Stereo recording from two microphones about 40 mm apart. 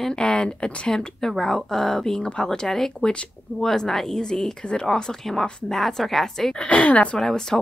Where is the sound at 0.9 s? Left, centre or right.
Centre.